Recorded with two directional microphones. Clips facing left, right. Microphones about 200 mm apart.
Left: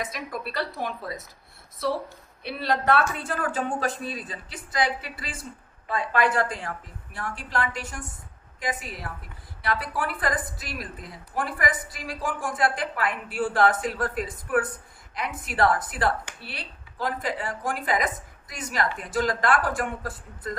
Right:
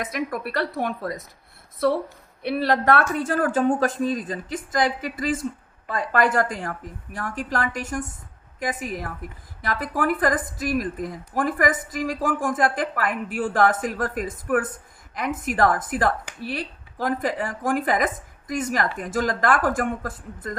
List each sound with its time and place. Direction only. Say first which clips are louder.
0.0 s a woman's voice: right 5 dB; 60° right (ahead or behind)
2.4 s speech: right 5 dB; 55° right (ahead or behind)